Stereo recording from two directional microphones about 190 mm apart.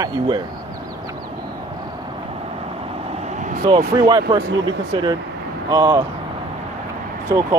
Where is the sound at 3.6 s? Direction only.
25° right (ahead or behind).